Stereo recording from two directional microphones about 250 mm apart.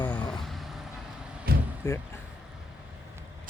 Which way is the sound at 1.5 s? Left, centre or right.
Right.